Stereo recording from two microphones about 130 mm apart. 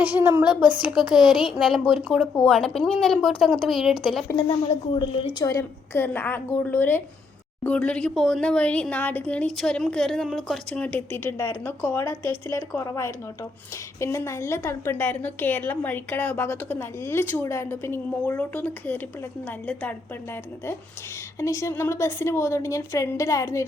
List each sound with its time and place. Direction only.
0.0 s a woman's voice: 15° right (ahead or behind)
4.4 s a woman's voice: 50° left (ahead or behind)
5.4 s speech: 20° left (ahead or behind)
21.3 s speech: 25° left (ahead or behind)